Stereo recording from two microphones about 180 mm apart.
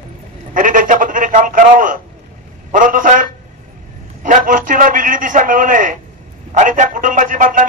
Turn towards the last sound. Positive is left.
turn(degrees=-45)  # may be behind; listen again after turning